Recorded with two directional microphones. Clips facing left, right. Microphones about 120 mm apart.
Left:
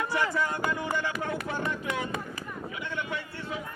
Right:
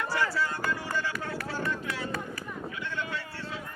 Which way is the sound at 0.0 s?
20° left (ahead or behind).